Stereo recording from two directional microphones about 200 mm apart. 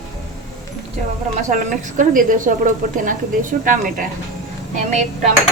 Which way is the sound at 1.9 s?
40° right (ahead or behind).